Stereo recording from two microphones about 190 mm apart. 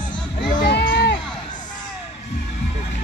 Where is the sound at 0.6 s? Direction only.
60° left (ahead or behind).